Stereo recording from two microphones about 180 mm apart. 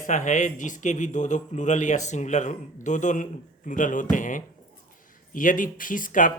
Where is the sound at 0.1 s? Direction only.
45° left (ahead or behind).